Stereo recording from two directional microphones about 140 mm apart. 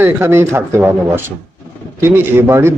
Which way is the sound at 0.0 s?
15° right (ahead or behind).